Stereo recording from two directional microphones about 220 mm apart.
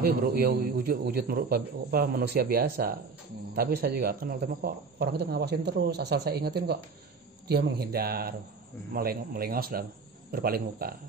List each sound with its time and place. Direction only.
0.0 s a man's voice: 45° right (ahead or behind)